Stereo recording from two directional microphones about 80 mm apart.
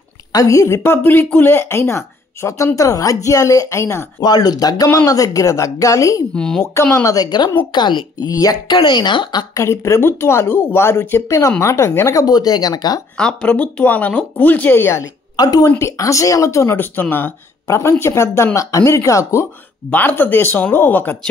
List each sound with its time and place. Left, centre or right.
0.3 s speech: left
4.2 s speech: left
6.3 s speech: centre
6.6 s speech: left
7.2 s speech: left
8.3 s speech: left
8.7 s speech: left
9.5 s speech: left
13.2 s speech: centre; by 15.0 s left
15.3 s a woman's voice: left
15.8 s speech: left
17.6 s speech: left
19.9 s speech: left